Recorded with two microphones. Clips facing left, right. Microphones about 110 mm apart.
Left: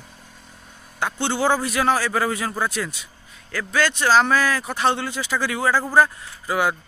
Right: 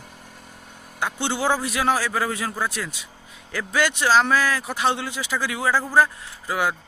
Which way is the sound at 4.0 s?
Centre (ahead or behind).